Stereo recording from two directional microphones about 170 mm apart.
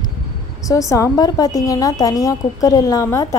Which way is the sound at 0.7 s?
20° left (ahead or behind).